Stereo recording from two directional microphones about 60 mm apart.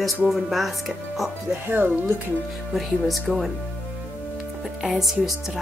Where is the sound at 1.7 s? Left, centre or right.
Right.